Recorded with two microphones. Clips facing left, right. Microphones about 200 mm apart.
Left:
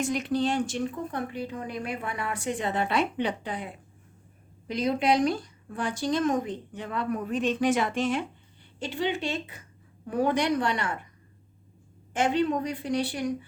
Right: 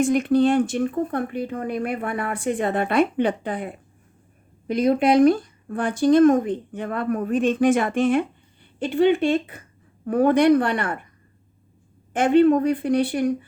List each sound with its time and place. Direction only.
0.0 s a woman's voice: 55° right (ahead or behind)
12.1 s speech: 55° right (ahead or behind)